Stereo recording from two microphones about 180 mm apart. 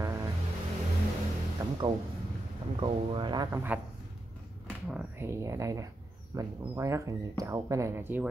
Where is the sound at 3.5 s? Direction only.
15° right (ahead or behind).